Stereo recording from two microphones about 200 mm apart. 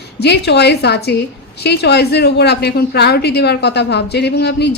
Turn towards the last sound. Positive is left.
turn(degrees=55)  # may be behind; listen again after turning